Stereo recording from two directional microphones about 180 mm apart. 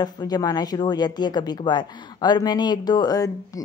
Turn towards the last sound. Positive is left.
turn(degrees=20)  # may be behind; listen again after turning